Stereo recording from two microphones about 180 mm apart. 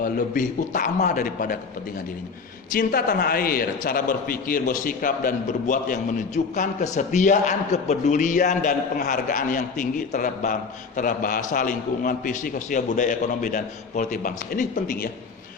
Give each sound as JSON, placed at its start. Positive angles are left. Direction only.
{"t": 0.0, "sound": "a man's voice", "side_deg": 45}
{"t": 2.7, "sound": "a man's voice", "side_deg": 55}